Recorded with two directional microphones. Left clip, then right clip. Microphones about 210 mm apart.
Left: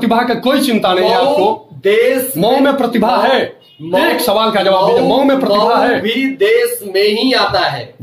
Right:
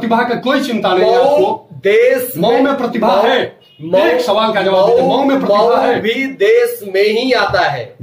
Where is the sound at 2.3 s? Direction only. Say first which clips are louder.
Left 1 dB; 45° left (ahead or behind).